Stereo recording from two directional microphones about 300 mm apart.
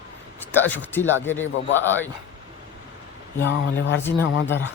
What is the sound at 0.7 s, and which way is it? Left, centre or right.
A man's voice, centre.